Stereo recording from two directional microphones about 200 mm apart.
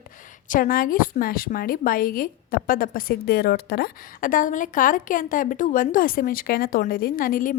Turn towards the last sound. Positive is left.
turn(degrees=45)  # may be behind; listen again after turning